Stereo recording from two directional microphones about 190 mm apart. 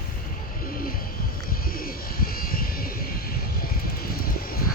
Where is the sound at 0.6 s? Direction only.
50° left (ahead or behind).